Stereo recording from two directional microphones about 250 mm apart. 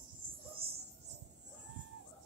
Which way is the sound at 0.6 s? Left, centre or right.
Right.